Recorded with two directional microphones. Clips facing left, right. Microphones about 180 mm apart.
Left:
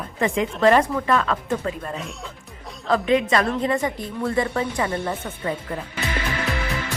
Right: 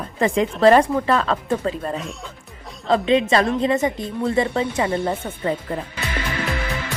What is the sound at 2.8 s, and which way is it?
A woman's voice, 25° right (ahead or behind).